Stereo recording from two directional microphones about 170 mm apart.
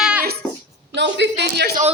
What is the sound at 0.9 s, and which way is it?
Speech, 90° right.